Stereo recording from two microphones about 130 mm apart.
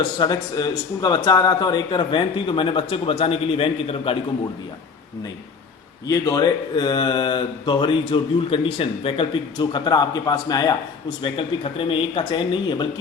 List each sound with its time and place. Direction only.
0.2 s speech: 30° left (ahead or behind); by 4.2 s 45° left (ahead or behind)
6.1 s speech: 25° left (ahead or behind)
11.2 s speech: 40° left (ahead or behind)